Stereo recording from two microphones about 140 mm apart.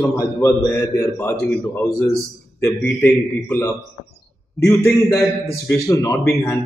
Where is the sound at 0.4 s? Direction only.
20° left (ahead or behind).